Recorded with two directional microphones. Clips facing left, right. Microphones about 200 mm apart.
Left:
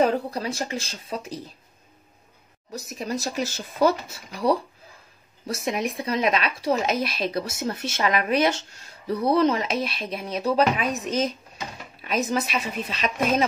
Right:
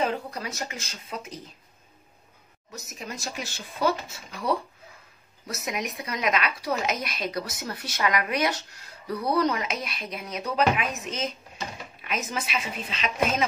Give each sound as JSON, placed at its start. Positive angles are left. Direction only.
{"t": 0.0, "sound": "a woman's voice", "side_deg": 35}
{"t": 2.7, "sound": "a woman's voice", "side_deg": 35}
{"t": 5.5, "sound": "a woman's voice", "side_deg": 30}